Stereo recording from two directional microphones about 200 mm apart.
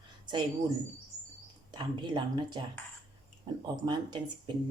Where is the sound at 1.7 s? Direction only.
20° right (ahead or behind).